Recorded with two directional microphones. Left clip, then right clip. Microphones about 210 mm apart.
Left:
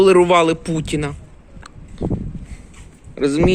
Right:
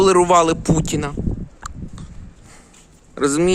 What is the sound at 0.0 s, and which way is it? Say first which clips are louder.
Speech: left 1 dB; 20° right (ahead or behind).